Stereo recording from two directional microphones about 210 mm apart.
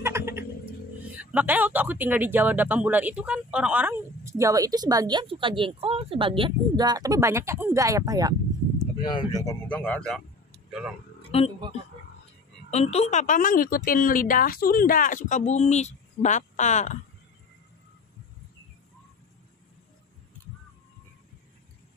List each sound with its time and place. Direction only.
0.0 s bird: 10° right (ahead or behind)
1.1 s speech: 5° right (ahead or behind)
8.7 s speech: 20° left (ahead or behind); by 10.2 s 5° left (ahead or behind)
11.3 s speech: 30° left (ahead or behind)
12.7 s speech: 30° left (ahead or behind)